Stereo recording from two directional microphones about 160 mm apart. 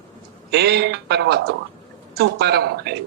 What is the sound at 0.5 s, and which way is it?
A man's voice, 90° right.